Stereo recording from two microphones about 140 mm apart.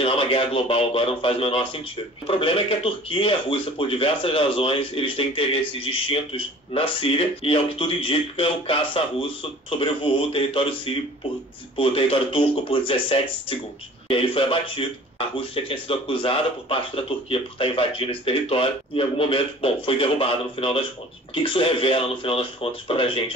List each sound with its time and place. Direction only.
0.0 s speech: 40° left (ahead or behind)